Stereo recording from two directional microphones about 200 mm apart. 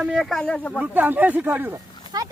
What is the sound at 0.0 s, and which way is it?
Speech, 5° right (ahead or behind).